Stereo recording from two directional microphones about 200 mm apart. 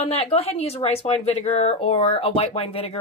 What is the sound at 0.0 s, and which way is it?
Speech, 30° left (ahead or behind).